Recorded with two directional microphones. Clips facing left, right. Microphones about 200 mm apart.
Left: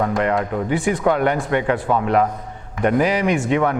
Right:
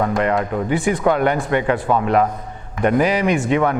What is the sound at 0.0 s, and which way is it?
A man's voice, 15° right (ahead or behind).